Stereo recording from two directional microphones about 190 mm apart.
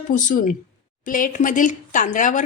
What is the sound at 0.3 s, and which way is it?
A woman's voice, 45° left (ahead or behind).